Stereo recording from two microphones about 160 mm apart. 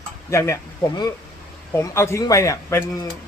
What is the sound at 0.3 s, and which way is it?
A man's voice, 20° left (ahead or behind).